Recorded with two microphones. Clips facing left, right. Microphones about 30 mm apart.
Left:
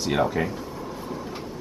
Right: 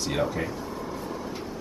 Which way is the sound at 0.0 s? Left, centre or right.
Centre.